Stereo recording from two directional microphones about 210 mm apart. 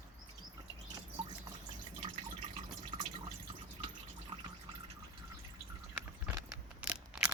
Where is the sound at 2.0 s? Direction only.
30° right (ahead or behind).